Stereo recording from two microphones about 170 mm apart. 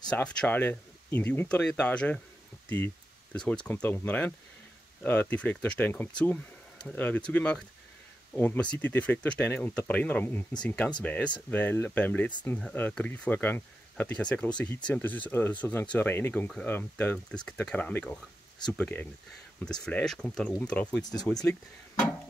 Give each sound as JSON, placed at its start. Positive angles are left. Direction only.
{"t": 0.1, "sound": "speech", "side_deg": 5}
{"t": 3.3, "sound": "speech", "side_deg": 5}
{"t": 21.0, "sound": "speech", "side_deg": 20}